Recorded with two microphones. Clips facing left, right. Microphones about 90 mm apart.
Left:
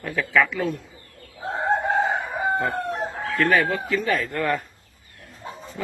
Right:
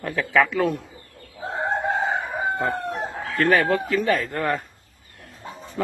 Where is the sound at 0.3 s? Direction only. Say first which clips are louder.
Right 2 dB; 90° right.